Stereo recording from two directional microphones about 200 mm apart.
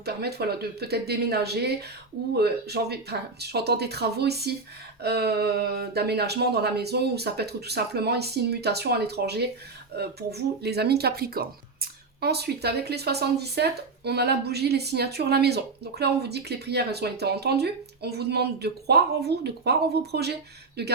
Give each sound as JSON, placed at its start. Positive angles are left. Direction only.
{"t": 0.0, "sound": "speech", "side_deg": -55}